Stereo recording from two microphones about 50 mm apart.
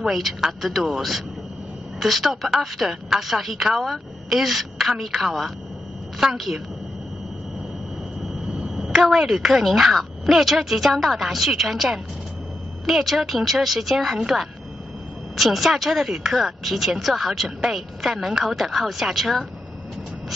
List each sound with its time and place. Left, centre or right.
0.1 s speech: centre
8.2 s vehicle: centre
8.5 s a sound: centre
9.0 s speech: centre